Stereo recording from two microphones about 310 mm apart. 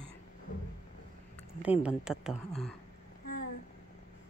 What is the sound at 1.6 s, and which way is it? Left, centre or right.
Speech, centre.